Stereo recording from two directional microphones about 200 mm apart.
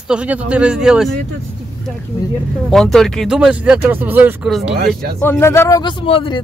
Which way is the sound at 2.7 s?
Centre (ahead or behind).